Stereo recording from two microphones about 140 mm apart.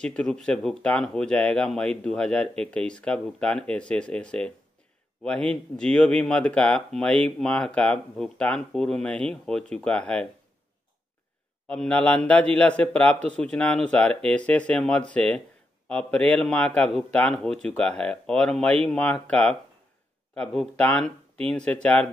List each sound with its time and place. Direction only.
0.0 s speech: 5° left (ahead or behind)
11.6 s speech: 5° left (ahead or behind)